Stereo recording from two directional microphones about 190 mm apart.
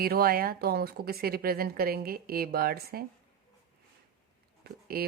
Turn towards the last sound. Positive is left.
turn(degrees=-55)  # may be behind; listen again after turning